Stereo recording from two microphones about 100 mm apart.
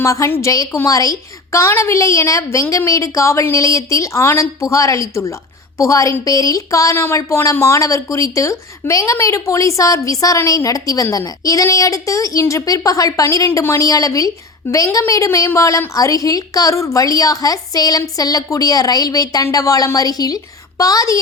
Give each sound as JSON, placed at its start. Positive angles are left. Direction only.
{"t": 0.0, "sound": "speech", "side_deg": 35}